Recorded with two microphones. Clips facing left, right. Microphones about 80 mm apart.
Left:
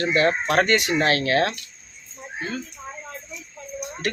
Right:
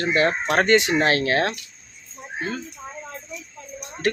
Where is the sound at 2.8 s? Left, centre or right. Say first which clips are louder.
Even; centre.